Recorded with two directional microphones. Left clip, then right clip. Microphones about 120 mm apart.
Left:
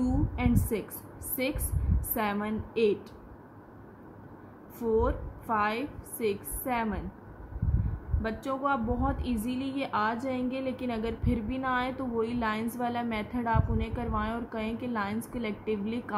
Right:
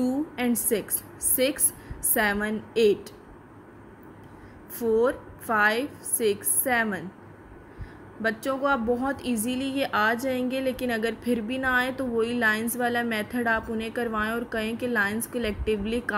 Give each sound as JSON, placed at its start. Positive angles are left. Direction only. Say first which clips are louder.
{"t": 0.0, "sound": "a woman's voice", "louder": "right 4 dB", "side_deg": -35}
{"t": 4.7, "sound": "a woman's voice", "louder": "right 5 dB", "side_deg": -30}
{"t": 8.2, "sound": "a woman's voice", "louder": "right 6 dB", "side_deg": -35}